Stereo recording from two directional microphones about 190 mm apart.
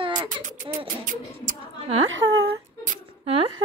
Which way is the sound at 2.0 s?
90° right.